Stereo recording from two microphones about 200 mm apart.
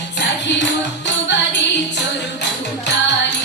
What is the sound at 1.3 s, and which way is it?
Music, 60° left (ahead or behind).